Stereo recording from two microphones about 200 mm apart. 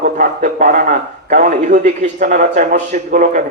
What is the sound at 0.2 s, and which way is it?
A man's voice, 40° right (ahead or behind).